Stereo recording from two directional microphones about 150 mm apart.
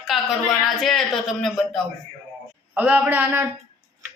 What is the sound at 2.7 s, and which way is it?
Speech, 10° right (ahead or behind).